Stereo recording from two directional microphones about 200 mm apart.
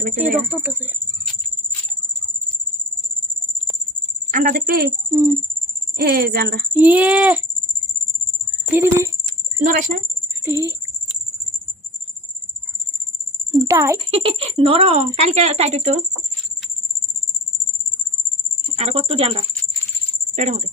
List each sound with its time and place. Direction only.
0.0 s speech: 45° right (ahead or behind)
0.4 s speech: 10° right (ahead or behind)
4.3 s speech: 40° right (ahead or behind)
5.1 s a child's voice: 15° right (ahead or behind)
6.0 s speech: 50° right (ahead or behind)
6.7 s a child's voice: 10° right (ahead or behind)
8.7 s a child's voice: 10° right (ahead or behind)
9.6 s speech: 40° right (ahead or behind)
10.5 s a child's voice: 10° right (ahead or behind)
13.7 s a child's voice: 15° right (ahead or behind)
14.1 s speech: 30° right (ahead or behind)
18.8 s speech: 30° right (ahead or behind)